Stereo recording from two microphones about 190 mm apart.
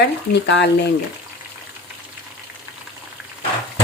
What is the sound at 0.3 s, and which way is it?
Speech, 65° left (ahead or behind).